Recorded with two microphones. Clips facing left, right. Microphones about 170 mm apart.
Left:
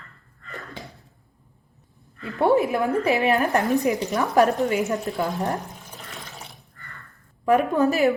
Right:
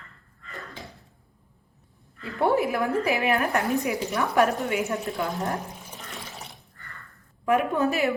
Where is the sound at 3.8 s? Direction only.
35° left (ahead or behind).